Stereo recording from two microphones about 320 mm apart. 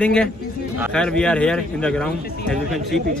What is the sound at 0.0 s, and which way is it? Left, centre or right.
A man's voice, centre.